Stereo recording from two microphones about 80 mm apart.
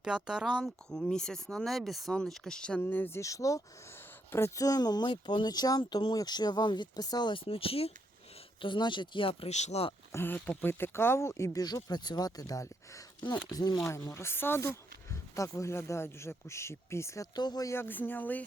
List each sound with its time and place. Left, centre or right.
0.0 s speech: centre
0.9 s speech: centre
2.8 s speech: left
3.2 s speech: left
4.6 s speech: left
8.6 s speech: left
10.1 s speech: left
11.6 s speech: left
13.2 s speech: left
14.1 s speech: left
17.3 s speech: left
17.7 s speech: left